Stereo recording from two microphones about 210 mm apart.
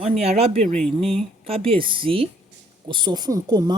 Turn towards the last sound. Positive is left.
turn(degrees=-20)  # may be behind; listen again after turning